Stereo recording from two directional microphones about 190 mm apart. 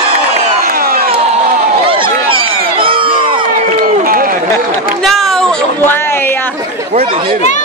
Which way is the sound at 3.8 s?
50° right (ahead or behind).